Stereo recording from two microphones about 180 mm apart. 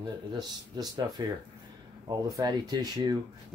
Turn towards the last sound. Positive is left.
turn(degrees=-25)  # may be behind; listen again after turning